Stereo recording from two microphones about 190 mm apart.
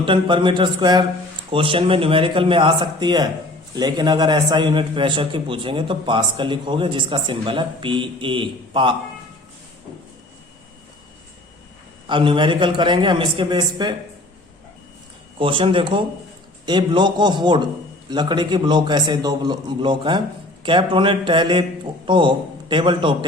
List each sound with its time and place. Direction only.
0.0 s a man's voice: 25° right (ahead or behind)
12.0 s a man's voice: 25° right (ahead or behind)
15.4 s a man's voice: 25° right (ahead or behind)